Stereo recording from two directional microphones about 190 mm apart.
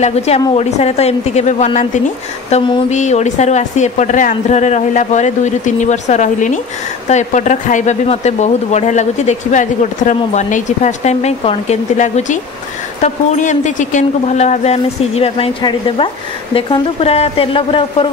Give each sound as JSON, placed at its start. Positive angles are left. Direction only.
{"t": 0.0, "sound": "a woman's voice", "side_deg": 35}